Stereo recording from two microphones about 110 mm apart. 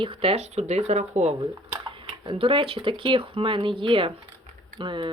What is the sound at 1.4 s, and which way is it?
Speech, 50° right (ahead or behind).